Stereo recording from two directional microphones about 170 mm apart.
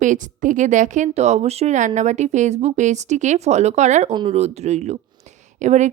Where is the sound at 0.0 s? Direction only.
50° right (ahead or behind).